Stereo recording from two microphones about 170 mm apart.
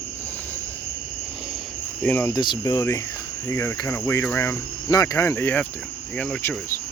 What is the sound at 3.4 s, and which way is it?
Cricket, 15° left (ahead or behind).